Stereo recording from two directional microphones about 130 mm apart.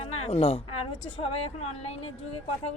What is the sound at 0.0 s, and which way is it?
A woman's voice, 50° left (ahead or behind).